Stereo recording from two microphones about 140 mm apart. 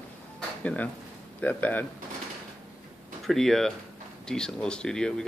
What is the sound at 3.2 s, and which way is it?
Speech, centre (ahead or behind).